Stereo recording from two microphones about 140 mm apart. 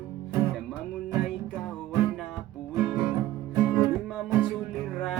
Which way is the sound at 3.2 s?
15° right (ahead or behind).